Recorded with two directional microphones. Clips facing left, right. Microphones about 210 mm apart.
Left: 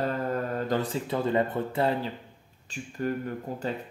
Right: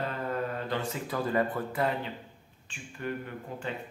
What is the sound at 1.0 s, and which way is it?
Speech, 25° left (ahead or behind).